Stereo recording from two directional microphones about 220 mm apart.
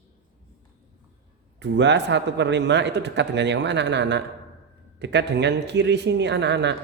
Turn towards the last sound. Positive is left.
turn(degrees=-50)  # may be behind; listen again after turning